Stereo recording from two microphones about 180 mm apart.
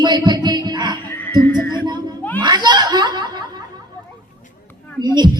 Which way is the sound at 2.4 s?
25° right (ahead or behind).